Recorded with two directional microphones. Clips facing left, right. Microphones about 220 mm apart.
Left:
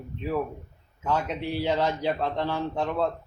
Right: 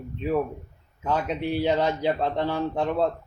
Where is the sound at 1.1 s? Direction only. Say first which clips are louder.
Right 2 dB; 15° right (ahead or behind).